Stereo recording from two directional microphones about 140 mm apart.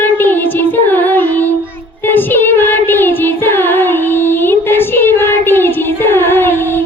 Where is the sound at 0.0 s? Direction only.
15° left (ahead or behind).